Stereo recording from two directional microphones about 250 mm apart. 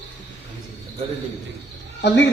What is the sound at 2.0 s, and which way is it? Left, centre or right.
Speech, left.